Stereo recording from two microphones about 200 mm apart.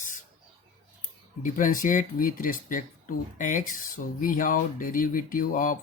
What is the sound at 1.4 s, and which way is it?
Speech, 40° left (ahead or behind).